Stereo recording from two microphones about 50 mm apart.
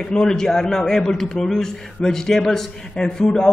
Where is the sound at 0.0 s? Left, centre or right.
Centre.